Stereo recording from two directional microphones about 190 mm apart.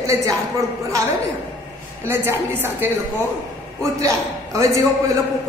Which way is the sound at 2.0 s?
10° right (ahead or behind).